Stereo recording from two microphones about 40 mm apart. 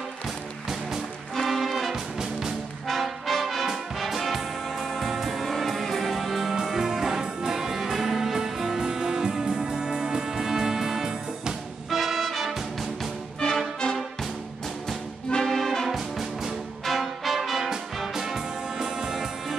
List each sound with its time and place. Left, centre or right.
1.3 s music: centre
2.9 s brass instrument: centre
4.1 s music: centre
13.4 s music: left
15.3 s brass instrument: centre
15.9 s music: centre